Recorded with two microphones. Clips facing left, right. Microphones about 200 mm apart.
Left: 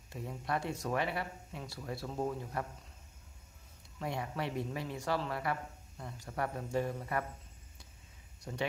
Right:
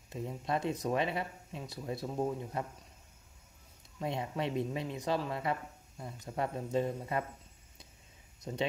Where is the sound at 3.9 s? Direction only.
20° right (ahead or behind).